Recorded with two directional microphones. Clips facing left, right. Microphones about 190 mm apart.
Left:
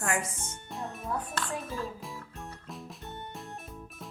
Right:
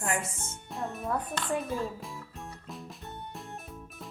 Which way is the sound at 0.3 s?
Centre (ahead or behind).